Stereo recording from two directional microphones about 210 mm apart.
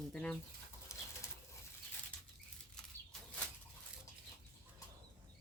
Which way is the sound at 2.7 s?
Centre (ahead or behind).